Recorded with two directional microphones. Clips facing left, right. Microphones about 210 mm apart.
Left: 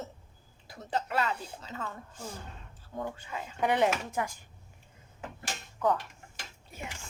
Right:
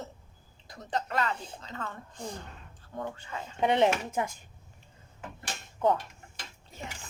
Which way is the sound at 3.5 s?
25° right (ahead or behind).